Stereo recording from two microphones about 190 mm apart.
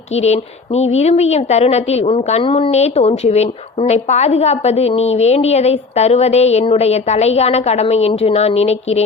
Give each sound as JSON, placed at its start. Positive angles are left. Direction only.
{"t": 0.2, "sound": "a woman's voice", "side_deg": 35}